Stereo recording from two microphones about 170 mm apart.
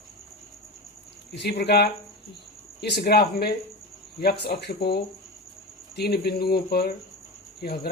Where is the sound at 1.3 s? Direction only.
75° left (ahead or behind).